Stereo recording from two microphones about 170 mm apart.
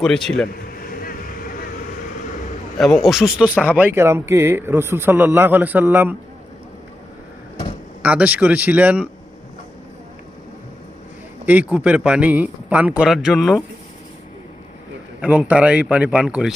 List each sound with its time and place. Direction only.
0.0 s a man's voice: 5° left (ahead or behind)
0.8 s vehicle: 55° left (ahead or behind)
2.7 s speech: centre (ahead or behind)
8.0 s speech: 10° right (ahead or behind)
11.4 s speech: 10° right (ahead or behind)
15.2 s speech: 5° right (ahead or behind)